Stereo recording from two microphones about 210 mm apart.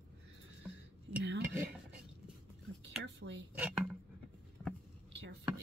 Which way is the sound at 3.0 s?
60° right (ahead or behind).